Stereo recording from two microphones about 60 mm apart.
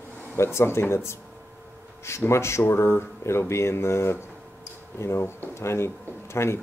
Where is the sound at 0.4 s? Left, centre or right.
Left.